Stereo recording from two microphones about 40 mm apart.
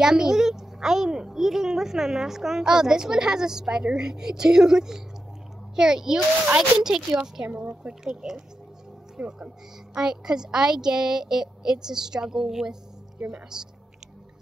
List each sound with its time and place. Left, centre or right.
0.0 s a child's voice: centre
9.2 s speech: right
9.9 s a child's voice: centre